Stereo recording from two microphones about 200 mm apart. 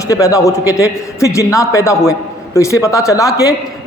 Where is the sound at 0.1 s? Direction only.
15° left (ahead or behind).